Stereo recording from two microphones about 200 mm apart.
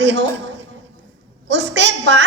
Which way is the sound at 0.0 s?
60° right (ahead or behind).